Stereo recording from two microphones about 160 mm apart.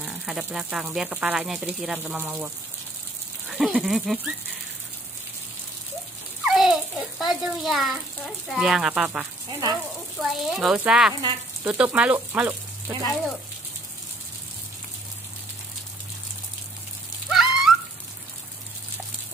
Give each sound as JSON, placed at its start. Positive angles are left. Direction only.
{"t": 0.0, "sound": "speech", "side_deg": -5}
{"t": 6.4, "sound": "a child's voice", "side_deg": -5}
{"t": 9.5, "sound": "speech", "side_deg": -25}
{"t": 10.2, "sound": "speech", "side_deg": 0}
{"t": 17.3, "sound": "raindrop", "side_deg": -5}